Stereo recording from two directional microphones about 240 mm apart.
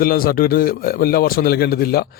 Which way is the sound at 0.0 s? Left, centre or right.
Left.